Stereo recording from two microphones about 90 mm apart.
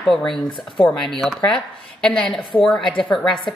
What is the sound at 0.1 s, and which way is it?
A woman's voice, 5° left (ahead or behind).